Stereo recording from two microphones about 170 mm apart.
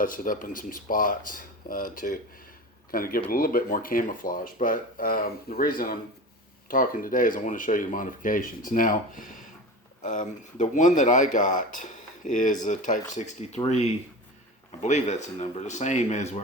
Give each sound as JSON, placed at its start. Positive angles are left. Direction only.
{"t": 0.0, "sound": "speech", "side_deg": 55}
{"t": 14.7, "sound": "speech", "side_deg": 45}